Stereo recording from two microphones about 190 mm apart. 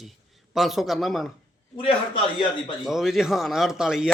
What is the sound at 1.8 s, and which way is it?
Speech, 25° left (ahead or behind).